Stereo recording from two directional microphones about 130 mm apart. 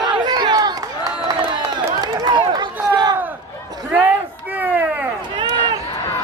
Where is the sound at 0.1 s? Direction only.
35° right (ahead or behind).